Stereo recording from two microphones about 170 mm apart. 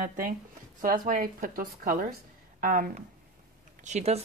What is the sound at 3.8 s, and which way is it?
Speech, 40° right (ahead or behind).